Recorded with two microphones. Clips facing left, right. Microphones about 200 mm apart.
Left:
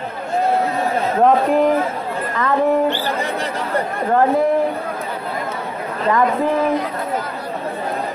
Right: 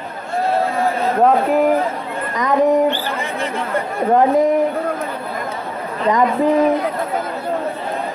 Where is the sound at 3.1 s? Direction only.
40° left (ahead or behind).